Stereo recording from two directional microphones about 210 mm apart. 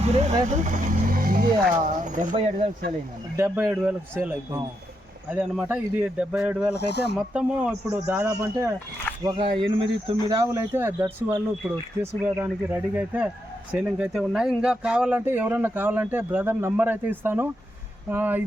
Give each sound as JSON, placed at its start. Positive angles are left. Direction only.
{"t": 0.0, "sound": "speech", "side_deg": -30}
{"t": 0.5, "sound": "vehicle", "side_deg": -40}
{"t": 2.0, "sound": "a sound", "side_deg": -40}
{"t": 2.3, "sound": "speech", "side_deg": -25}
{"t": 3.3, "sound": "speech", "side_deg": -10}
{"t": 6.7, "sound": "speech", "side_deg": 50}
{"t": 7.2, "sound": "speech", "side_deg": -5}
{"t": 9.2, "sound": "speech", "side_deg": -25}